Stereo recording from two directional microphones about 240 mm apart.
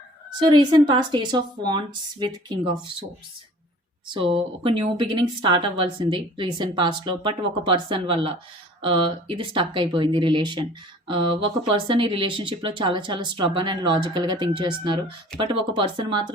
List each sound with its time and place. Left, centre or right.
0.3 s speech: centre
4.1 s speech: right